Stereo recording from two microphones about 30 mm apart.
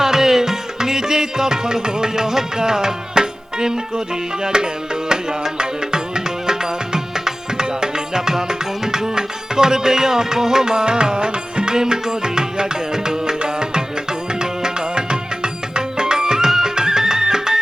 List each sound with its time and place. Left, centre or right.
0.0 s music: centre; by 11.7 s right
11.7 s music: right